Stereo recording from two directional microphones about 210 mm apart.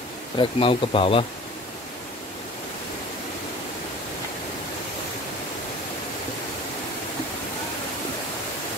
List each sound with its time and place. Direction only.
0.4 s speech: 25° left (ahead or behind)